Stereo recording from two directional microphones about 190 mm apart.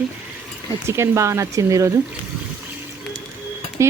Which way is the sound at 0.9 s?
15° right (ahead or behind).